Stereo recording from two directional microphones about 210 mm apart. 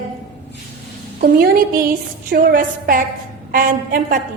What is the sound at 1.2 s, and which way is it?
A woman's voice, 45° right (ahead or behind).